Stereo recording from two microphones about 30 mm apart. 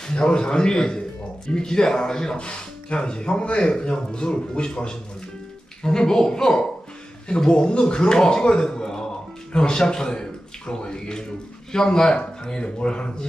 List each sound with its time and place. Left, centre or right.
0.1 s a man's voice: left
2.3 s speech: left
3.4 s a man's voice: left